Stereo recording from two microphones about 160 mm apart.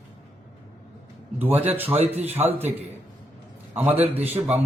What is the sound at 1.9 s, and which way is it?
Speech, 40° right (ahead or behind).